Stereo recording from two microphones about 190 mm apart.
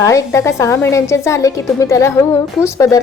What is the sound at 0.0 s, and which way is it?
A woman's voice, 15° left (ahead or behind).